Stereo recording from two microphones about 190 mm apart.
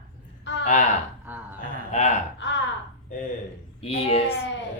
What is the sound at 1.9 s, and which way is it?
Speech, 40° left (ahead or behind).